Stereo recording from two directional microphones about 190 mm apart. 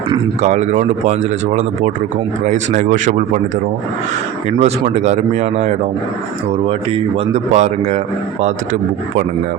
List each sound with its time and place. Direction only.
0.4 s speech: 35° right (ahead or behind)
4.4 s speech: 35° right (ahead or behind)
7.5 s speech: 40° right (ahead or behind)